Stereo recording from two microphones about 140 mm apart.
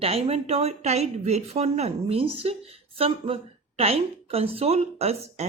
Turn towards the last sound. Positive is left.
turn(degrees=-50)  # may be behind; listen again after turning